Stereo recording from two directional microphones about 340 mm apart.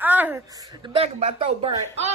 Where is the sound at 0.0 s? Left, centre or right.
Centre.